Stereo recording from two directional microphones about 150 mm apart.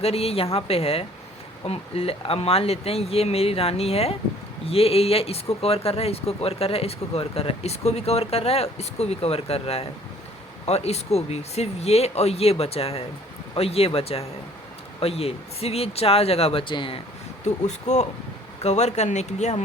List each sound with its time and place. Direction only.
0.0 s speech: 40° left (ahead or behind)
17.4 s speech: 50° left (ahead or behind)